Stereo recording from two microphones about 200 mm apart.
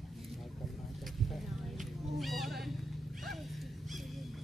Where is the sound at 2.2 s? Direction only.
Centre (ahead or behind).